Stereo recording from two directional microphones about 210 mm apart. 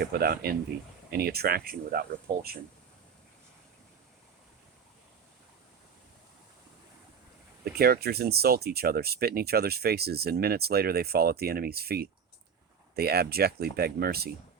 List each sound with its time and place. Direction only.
0.0 s speech: 50° right (ahead or behind)
7.6 s speech: 45° right (ahead or behind)